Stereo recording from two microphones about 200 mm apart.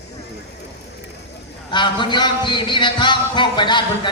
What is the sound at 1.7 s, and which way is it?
Music, 25° left (ahead or behind).